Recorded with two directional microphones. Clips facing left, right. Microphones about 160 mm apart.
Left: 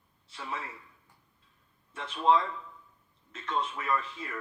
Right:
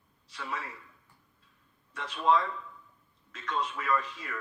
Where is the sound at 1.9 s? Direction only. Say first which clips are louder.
Left 1 dB; 25° left (ahead or behind).